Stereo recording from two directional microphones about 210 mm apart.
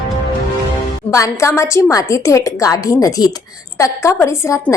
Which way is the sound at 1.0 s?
15° left (ahead or behind).